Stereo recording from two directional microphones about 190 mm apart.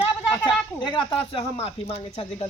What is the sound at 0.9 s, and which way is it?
Speech, 25° left (ahead or behind).